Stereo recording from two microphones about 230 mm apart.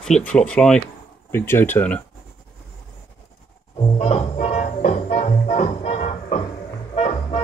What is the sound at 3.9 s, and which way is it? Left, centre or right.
Music, left.